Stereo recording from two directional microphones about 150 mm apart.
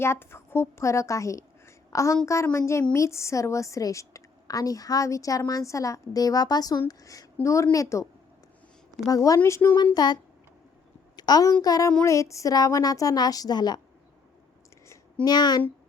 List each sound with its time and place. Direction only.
0.0 s a woman's voice: 15° left (ahead or behind)
9.0 s a woman's voice: 25° left (ahead or behind)
9.7 s a woman's voice: 30° left (ahead or behind)
11.2 s a woman's voice: 25° left (ahead or behind)
14.8 s a sound: 25° left (ahead or behind)